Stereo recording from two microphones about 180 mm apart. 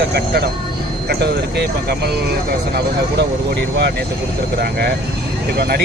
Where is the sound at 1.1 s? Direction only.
65° right (ahead or behind).